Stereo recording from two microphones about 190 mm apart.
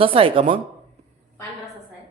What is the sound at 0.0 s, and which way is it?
Speech, 30° right (ahead or behind).